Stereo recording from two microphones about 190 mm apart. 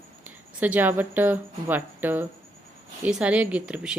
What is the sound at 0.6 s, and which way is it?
A woman's voice, 10° right (ahead or behind).